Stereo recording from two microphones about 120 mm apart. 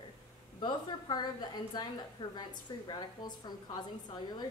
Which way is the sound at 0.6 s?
35° left (ahead or behind).